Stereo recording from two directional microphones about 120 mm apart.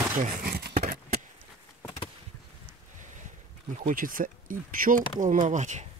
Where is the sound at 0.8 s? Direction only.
65° right (ahead or behind).